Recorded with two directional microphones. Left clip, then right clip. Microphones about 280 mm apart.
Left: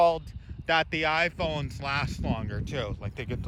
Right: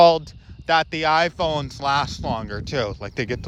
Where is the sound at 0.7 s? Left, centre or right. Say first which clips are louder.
Right 6 dB; centre.